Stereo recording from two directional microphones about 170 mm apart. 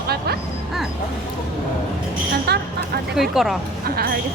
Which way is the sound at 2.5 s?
70° right (ahead or behind).